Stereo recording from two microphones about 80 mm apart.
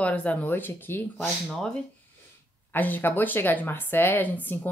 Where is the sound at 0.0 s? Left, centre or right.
Centre.